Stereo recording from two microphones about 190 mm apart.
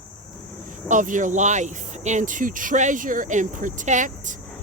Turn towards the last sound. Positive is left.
turn(degrees=-40)  # may be behind; listen again after turning